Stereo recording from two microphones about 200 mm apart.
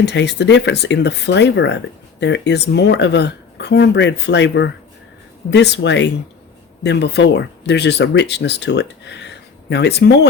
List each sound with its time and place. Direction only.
0.0 s speech: 60° left (ahead or behind)